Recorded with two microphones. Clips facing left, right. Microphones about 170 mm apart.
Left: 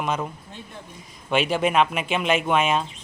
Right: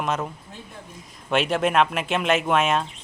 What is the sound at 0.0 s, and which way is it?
Speech, centre (ahead or behind).